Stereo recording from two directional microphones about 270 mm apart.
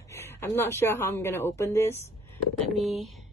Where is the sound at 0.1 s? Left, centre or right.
Centre.